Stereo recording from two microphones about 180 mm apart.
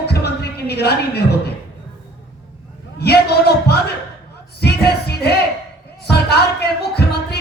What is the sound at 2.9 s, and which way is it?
A man's voice, 65° left (ahead or behind).